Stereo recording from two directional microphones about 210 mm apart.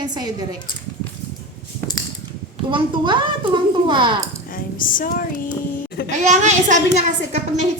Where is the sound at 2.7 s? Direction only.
25° right (ahead or behind).